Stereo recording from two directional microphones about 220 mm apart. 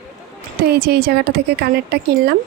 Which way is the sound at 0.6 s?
45° right (ahead or behind).